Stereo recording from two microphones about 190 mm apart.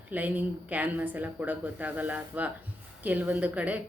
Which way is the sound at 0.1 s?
10° right (ahead or behind).